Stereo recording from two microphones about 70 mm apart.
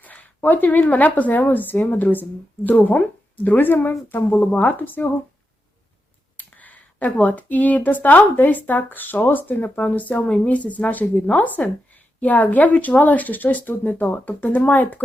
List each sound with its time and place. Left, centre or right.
0.0 s speech: left
6.3 s speech: left